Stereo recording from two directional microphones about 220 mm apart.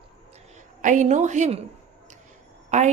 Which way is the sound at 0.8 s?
35° right (ahead or behind).